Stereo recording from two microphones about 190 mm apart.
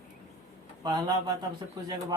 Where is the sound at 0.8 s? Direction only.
20° right (ahead or behind).